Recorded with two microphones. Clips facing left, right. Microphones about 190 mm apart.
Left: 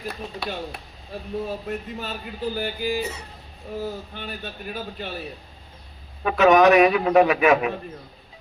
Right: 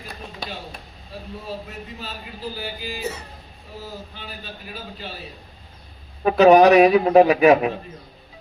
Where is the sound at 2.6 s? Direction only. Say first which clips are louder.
Left 6 dB; 50° left (ahead or behind).